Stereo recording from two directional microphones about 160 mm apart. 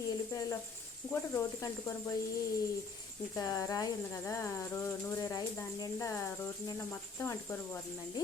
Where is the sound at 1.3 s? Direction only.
15° left (ahead or behind).